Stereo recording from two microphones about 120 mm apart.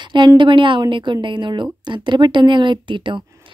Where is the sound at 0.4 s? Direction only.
40° right (ahead or behind).